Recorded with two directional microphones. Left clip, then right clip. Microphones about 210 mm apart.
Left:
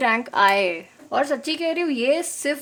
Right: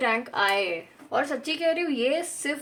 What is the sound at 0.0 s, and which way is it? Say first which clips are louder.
A woman's voice: left 6 dB; 55° left (ahead or behind).